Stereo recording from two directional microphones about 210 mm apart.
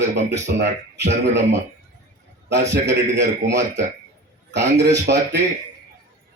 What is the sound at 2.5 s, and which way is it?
A man's voice, 55° right (ahead or behind).